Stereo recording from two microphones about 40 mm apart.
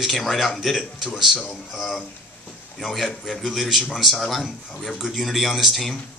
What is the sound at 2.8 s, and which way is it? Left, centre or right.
Speech, centre.